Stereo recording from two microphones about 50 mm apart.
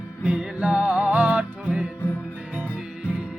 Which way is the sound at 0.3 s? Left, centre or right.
Right.